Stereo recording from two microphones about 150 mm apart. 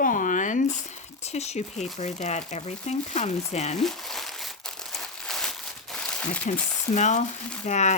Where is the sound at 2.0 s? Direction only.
50° left (ahead or behind).